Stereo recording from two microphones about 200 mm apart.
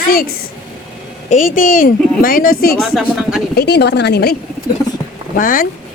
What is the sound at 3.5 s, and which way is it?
A woman's voice, 55° left (ahead or behind).